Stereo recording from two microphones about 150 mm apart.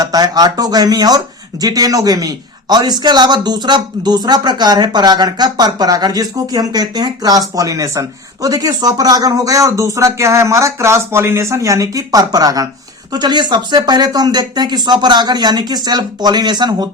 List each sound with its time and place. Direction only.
0.0 s a man's voice: 25° right (ahead or behind)